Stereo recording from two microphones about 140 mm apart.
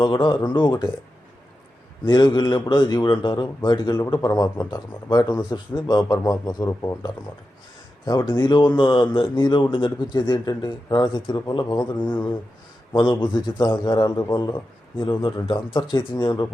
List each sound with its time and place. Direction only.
0.0 s speech: 35° left (ahead or behind)
2.0 s a man's voice: 30° left (ahead or behind)